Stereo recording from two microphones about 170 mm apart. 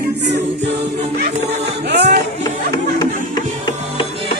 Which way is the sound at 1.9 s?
75° right (ahead or behind).